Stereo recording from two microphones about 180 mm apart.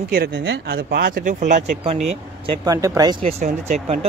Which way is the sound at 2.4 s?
25° right (ahead or behind).